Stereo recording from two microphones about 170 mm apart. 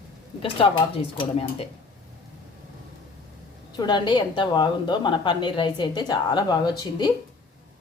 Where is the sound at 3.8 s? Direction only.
25° left (ahead or behind).